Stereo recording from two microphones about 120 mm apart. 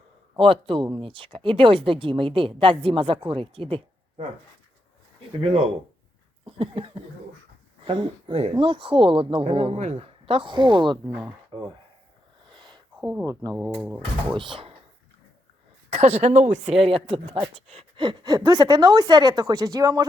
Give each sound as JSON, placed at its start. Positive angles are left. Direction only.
{"t": 0.3, "sound": "speech", "side_deg": -50}
{"t": 5.4, "sound": "speech", "side_deg": -55}
{"t": 12.5, "sound": "a sound", "side_deg": -40}
{"t": 13.0, "sound": "speech", "side_deg": -10}
{"t": 13.2, "sound": "a woman's voice", "side_deg": -30}
{"t": 14.3, "sound": "speech", "side_deg": -45}
{"t": 15.9, "sound": "a woman's voice", "side_deg": -65}